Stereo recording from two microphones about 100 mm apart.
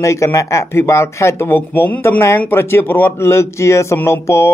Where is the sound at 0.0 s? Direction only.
30° left (ahead or behind).